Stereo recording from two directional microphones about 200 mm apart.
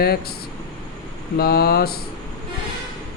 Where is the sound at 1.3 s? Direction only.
50° left (ahead or behind).